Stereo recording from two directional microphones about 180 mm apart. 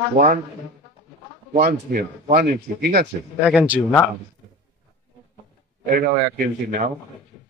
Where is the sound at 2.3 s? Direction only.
60° right (ahead or behind).